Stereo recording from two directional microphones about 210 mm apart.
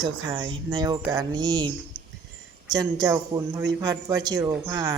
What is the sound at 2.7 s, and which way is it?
A woman's voice, 20° right (ahead or behind).